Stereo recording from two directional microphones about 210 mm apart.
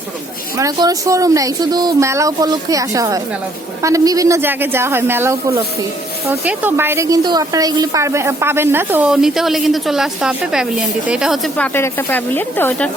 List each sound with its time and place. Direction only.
0.5 s a woman's voice: 15° right (ahead or behind); by 12.9 s 10° left (ahead or behind)